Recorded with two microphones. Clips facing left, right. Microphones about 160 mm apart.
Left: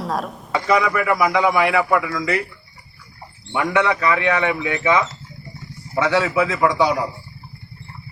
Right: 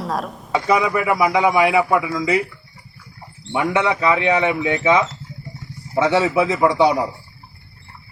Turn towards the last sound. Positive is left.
turn(degrees=-25)  # may be behind; listen again after turning